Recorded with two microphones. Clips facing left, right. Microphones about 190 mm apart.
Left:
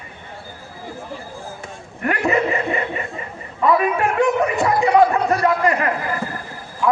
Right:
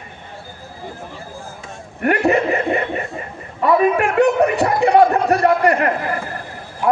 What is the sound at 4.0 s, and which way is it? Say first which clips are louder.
Speech: right 3 dB; 65° right (ahead or behind).